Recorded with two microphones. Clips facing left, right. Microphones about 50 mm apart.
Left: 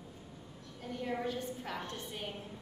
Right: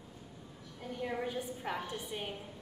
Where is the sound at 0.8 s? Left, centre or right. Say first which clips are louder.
Even; centre.